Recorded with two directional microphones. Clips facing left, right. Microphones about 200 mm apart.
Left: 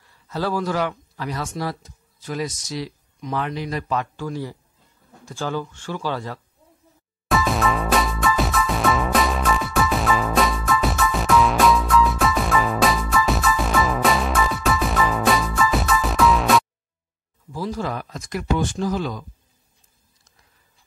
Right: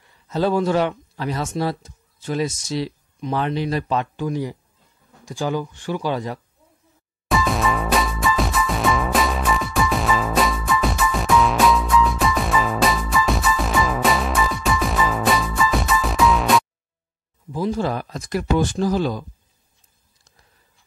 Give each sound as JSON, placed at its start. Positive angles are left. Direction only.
{"t": 0.3, "sound": "speech", "side_deg": -25}
{"t": 7.2, "sound": "music", "side_deg": 0}
{"t": 17.5, "sound": "speech", "side_deg": -20}